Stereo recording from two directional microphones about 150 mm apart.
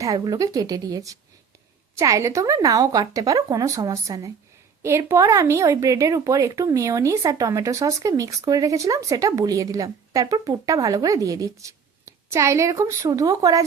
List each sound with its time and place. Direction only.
0.0 s a woman's voice: 25° right (ahead or behind)